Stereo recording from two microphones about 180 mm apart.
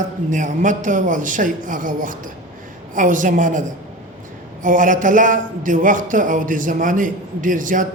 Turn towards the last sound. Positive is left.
turn(degrees=-45)  # may be behind; listen again after turning